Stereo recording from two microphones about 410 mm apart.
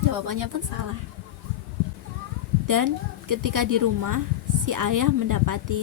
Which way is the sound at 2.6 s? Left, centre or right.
Right.